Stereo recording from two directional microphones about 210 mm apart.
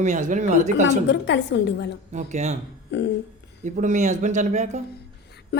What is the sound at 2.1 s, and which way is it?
Speech, 35° right (ahead or behind).